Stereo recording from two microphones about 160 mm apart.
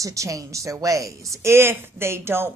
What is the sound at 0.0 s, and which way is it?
A woman's voice, 20° right (ahead or behind).